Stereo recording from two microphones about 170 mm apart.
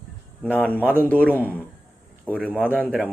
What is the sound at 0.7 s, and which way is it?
Speech, 10° right (ahead or behind).